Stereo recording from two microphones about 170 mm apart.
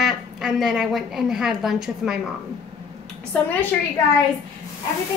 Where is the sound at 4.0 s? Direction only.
20° left (ahead or behind).